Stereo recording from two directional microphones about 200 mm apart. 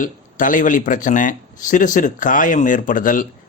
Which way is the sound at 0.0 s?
40° left (ahead or behind).